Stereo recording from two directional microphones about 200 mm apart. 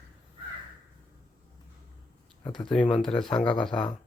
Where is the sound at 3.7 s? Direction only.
25° left (ahead or behind).